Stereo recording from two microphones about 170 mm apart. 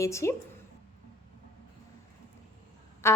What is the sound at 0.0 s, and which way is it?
Speech, 15° left (ahead or behind).